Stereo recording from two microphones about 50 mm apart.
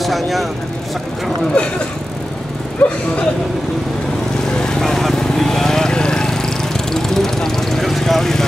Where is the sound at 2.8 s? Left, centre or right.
Left.